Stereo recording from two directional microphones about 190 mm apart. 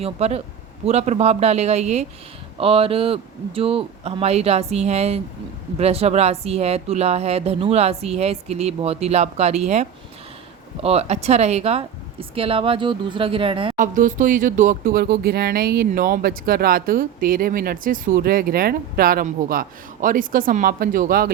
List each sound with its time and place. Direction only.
0.0 s speech: 35° right (ahead or behind)
10.8 s a woman's voice: 35° right (ahead or behind)
13.7 s speech: 45° right (ahead or behind)